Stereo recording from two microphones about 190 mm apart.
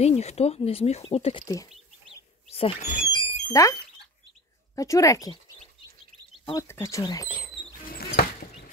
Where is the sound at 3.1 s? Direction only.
15° left (ahead or behind).